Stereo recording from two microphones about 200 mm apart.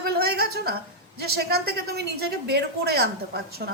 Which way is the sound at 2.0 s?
55° right (ahead or behind).